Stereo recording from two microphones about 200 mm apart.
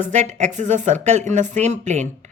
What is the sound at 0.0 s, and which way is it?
Speech, 35° right (ahead or behind).